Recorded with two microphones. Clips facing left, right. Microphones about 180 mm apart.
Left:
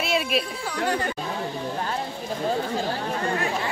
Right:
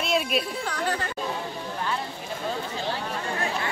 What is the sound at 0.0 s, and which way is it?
Speech, centre (ahead or behind).